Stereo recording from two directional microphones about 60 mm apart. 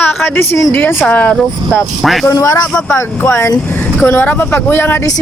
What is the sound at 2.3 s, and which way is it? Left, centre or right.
Speech, left.